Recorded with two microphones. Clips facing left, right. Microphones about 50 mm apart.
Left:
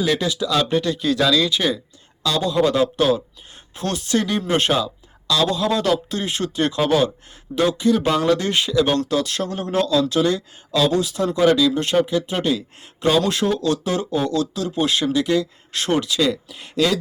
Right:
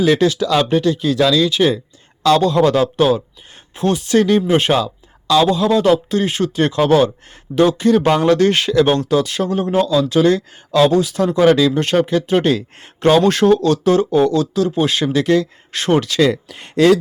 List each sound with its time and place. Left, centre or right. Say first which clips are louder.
0.2 s a man's voice: right 8 dB; right
0.5 s speech: right 5 dB; right
2.2 s a man's voice: right 6 dB; right
3.8 s speech: right 7 dB; right
8.9 s speech: right 5 dB; right
10.2 s speech: right 6 dB; right
16.3 s speech: right 5 dB; right